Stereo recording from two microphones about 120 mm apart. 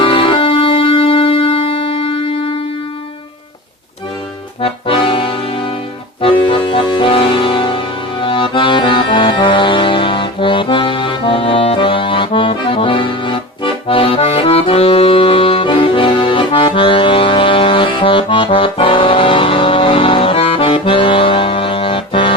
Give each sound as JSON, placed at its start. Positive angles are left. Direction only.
{"t": 0.0, "sound": "music", "side_deg": 45}
{"t": 4.6, "sound": "accordion", "side_deg": 45}